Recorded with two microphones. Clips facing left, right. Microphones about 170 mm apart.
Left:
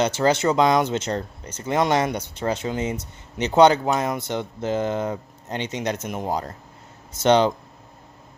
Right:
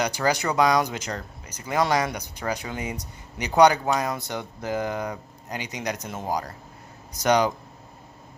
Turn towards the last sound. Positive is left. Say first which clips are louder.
# left 4 dB
turn(degrees=25)  # may be behind; listen again after turning